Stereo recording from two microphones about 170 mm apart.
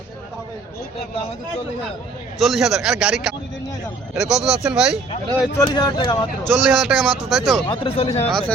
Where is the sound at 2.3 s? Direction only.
Centre (ahead or behind).